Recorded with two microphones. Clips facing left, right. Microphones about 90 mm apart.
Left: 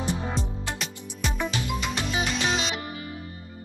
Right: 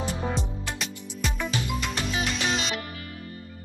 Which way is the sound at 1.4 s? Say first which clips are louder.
Left 1 dB; 20° left (ahead or behind).